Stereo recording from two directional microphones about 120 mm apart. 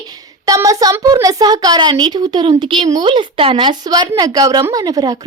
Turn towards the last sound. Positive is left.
turn(degrees=-35)  # may be behind; listen again after turning